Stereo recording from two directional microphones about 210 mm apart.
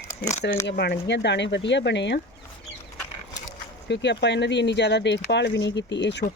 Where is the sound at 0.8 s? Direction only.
55° left (ahead or behind).